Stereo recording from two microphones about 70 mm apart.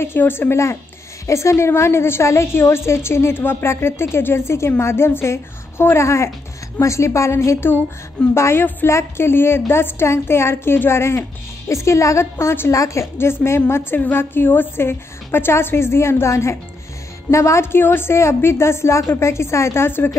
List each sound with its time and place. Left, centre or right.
0.0 s a woman's voice: left